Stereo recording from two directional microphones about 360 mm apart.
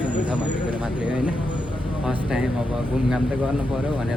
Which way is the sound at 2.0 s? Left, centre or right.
Centre.